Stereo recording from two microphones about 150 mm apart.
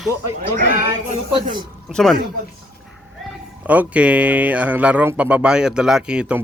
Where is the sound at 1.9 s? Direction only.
Centre (ahead or behind).